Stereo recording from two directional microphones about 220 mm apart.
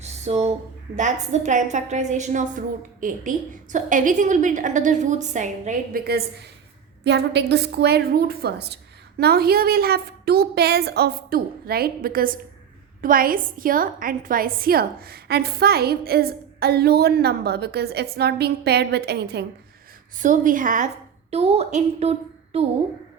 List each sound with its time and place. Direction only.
0.0 s a sound: 30° right (ahead or behind)
0.9 s a woman's voice: 35° right (ahead or behind)
20.1 s a woman's voice: 35° right (ahead or behind)